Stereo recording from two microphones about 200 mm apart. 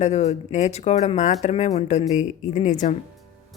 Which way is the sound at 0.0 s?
35° left (ahead or behind).